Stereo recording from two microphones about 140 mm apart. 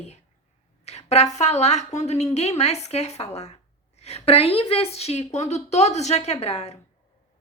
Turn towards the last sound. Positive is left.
turn(degrees=50)  # may be behind; listen again after turning